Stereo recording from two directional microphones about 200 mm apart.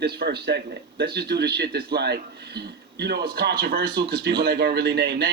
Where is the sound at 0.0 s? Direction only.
55° right (ahead or behind).